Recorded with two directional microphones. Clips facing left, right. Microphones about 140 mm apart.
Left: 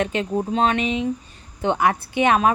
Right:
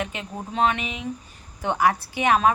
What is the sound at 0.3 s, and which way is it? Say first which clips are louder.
A woman's voice: left 3 dB; 25° left (ahead or behind).